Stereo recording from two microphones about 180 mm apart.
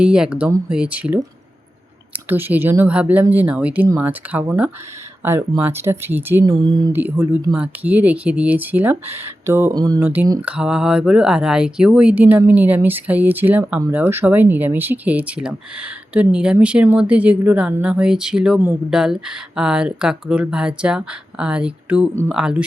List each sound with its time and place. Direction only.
0.0 s speech: 5° right (ahead or behind)
6.4 s speech: 25° right (ahead or behind)
6.9 s speech: 10° right (ahead or behind)
10.4 s speech: 5° right (ahead or behind)